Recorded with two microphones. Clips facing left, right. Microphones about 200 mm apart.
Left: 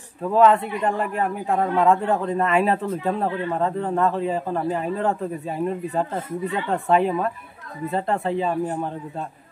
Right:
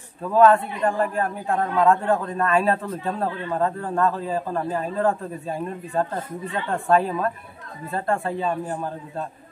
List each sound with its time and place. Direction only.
0.3 s a man's voice: 20° left (ahead or behind)